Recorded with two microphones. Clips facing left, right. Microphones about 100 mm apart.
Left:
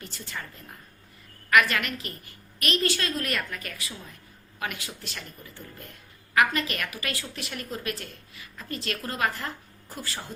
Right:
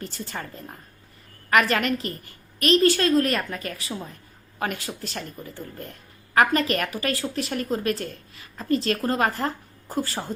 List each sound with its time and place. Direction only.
0.0 s speech: 35° right (ahead or behind)